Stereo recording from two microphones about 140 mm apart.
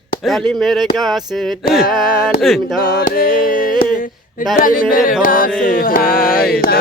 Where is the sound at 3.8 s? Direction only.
75° left (ahead or behind).